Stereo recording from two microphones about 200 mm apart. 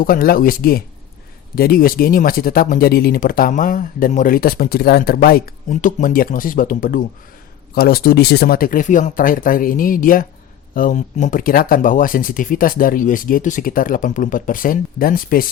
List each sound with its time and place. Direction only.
0.0 s speech: 45° left (ahead or behind)